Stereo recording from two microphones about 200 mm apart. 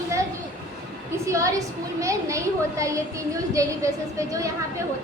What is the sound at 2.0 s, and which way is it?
A woman's voice, 15° right (ahead or behind).